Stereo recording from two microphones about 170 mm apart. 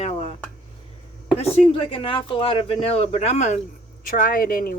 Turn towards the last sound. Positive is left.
turn(degrees=55)  # may be behind; listen again after turning